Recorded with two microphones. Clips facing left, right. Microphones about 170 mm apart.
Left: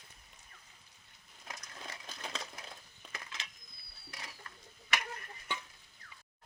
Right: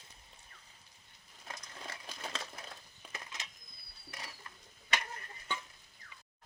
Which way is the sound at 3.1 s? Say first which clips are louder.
Even; 20° right (ahead or behind).